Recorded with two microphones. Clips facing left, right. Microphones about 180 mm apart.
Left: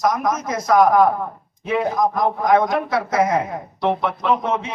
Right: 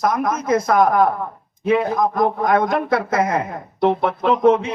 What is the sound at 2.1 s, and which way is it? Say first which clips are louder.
A man's voice: left 1 dB; 55° right (ahead or behind).